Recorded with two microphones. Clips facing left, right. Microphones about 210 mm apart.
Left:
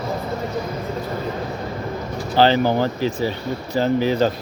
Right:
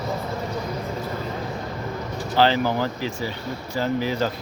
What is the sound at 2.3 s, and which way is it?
Speech, 30° left (ahead or behind).